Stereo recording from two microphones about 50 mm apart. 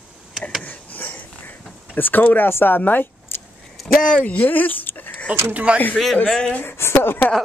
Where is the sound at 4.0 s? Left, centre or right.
Left.